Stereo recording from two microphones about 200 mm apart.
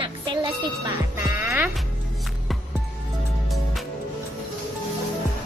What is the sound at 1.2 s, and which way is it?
Speech, 10° right (ahead or behind).